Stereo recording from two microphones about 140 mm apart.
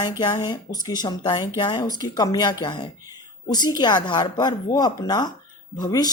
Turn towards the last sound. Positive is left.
turn(degrees=30)  # may be behind; listen again after turning